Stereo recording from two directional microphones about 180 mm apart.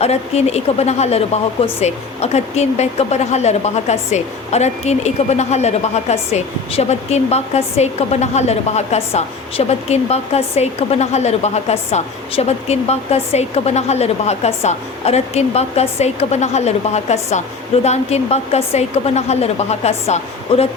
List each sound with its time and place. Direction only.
0.0 s speech: 35° left (ahead or behind)